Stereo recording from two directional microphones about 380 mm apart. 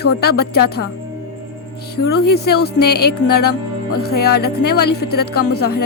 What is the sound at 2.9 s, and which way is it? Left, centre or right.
Music, left.